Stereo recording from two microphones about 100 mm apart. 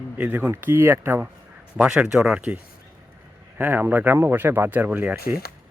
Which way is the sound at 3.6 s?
20° right (ahead or behind).